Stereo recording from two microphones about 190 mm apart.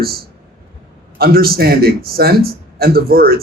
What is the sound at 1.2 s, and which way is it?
A man's voice, 55° right (ahead or behind).